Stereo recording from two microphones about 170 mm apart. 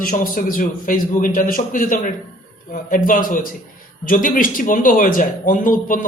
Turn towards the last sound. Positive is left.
turn(degrees=50)  # may be behind; listen again after turning